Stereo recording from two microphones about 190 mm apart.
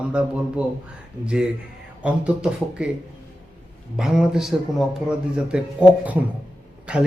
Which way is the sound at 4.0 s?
Centre (ahead or behind).